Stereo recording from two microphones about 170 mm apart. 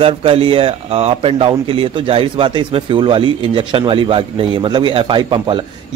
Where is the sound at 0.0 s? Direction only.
35° right (ahead or behind).